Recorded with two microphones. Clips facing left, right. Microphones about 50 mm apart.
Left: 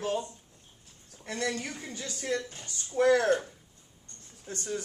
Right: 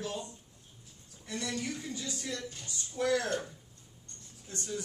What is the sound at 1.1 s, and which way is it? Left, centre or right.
Speech, left.